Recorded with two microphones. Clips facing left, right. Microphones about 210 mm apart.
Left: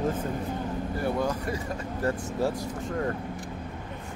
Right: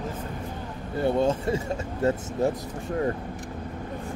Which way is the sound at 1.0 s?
25° right (ahead or behind).